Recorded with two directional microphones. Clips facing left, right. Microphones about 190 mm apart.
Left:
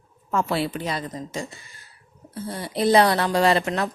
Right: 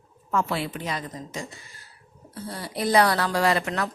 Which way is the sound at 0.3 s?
35° left (ahead or behind).